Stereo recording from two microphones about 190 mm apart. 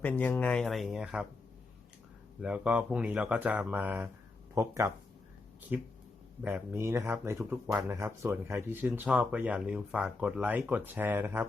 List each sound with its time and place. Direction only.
0.0 s speech: 10° left (ahead or behind)
2.4 s speech: 5° right (ahead or behind)